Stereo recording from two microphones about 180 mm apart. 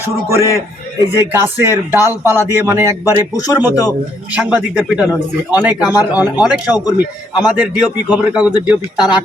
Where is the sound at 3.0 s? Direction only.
20° left (ahead or behind).